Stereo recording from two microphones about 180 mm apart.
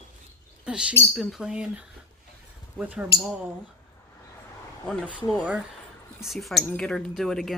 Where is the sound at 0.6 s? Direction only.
5° right (ahead or behind).